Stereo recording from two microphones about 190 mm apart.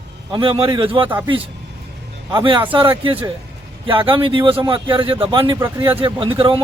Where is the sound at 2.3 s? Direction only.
25° right (ahead or behind).